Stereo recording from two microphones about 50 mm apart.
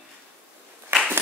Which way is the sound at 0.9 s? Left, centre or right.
Right.